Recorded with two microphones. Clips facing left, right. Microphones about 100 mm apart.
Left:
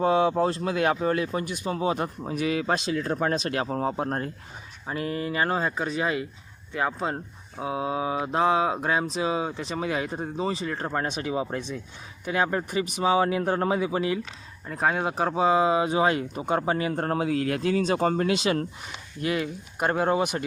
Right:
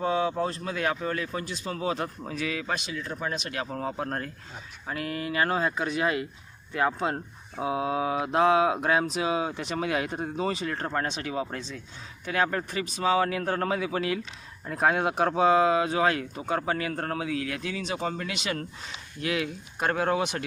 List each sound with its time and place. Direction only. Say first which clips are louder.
0.0 s speech: left 5 dB; 30° left (ahead or behind)
2.5 s speech: left 10 dB; 30° left (ahead or behind)
5.6 s speech: even; centre (ahead or behind)
15.7 s speech: left 2 dB; 20° left (ahead or behind); by 18.3 s 45° left (ahead or behind)
18.3 s speech: left 8 dB; 30° left (ahead or behind)
19.2 s speech: left 2 dB; 5° left (ahead or behind)